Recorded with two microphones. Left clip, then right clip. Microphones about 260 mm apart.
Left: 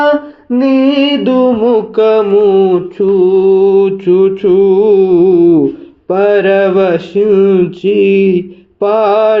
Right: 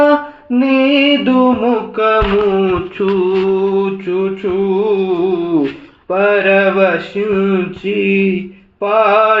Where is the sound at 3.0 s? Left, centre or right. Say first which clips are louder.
Left 5 dB; centre.